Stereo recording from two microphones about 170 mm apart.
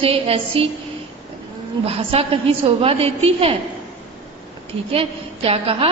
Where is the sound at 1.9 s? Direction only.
35° right (ahead or behind).